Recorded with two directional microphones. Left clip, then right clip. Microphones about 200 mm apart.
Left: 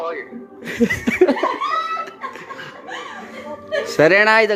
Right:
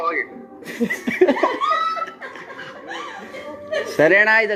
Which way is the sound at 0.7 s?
30° left (ahead or behind).